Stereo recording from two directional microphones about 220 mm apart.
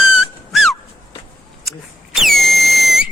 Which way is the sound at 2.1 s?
Centre (ahead or behind).